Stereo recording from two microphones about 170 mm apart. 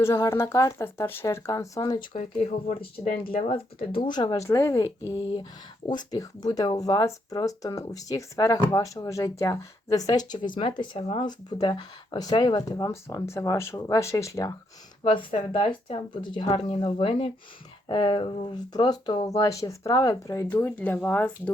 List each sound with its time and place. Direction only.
0.0 s speech: 15° left (ahead or behind)
2.4 s speech: 45° left (ahead or behind)
3.3 s speech: 35° left (ahead or behind); by 4.9 s 15° left (ahead or behind)
5.9 s speech: 25° left (ahead or behind)
15.3 s speech: 35° left (ahead or behind); by 21.5 s 10° left (ahead or behind)